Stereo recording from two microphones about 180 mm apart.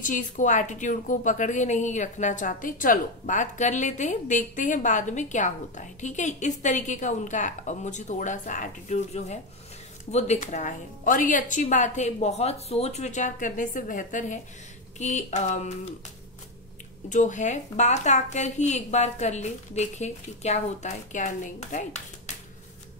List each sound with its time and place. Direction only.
0.0 s a woman's voice: 45° left (ahead or behind)
17.1 s a woman's voice: 45° left (ahead or behind)